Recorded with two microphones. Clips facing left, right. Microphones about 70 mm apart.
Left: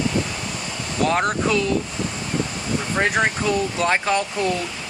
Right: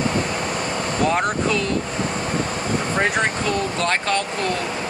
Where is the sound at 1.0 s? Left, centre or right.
Centre.